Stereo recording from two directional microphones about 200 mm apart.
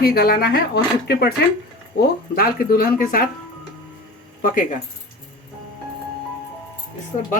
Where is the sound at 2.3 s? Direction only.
50° left (ahead or behind).